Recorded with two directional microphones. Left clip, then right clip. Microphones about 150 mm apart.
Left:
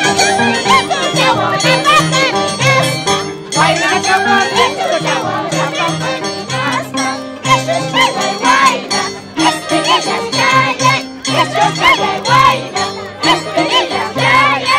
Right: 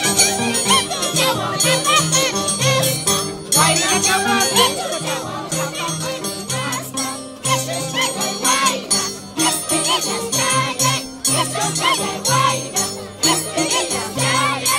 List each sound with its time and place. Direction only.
0.0 s jingle bell: 50° right (ahead or behind)
1.2 s music: 30° right (ahead or behind)
1.6 s music: 45° right (ahead or behind)
7.9 s jingle bell: 45° right (ahead or behind)